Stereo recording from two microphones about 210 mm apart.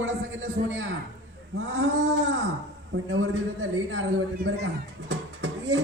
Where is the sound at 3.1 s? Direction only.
75° right (ahead or behind).